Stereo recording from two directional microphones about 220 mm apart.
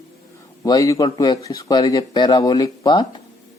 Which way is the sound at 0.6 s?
15° left (ahead or behind).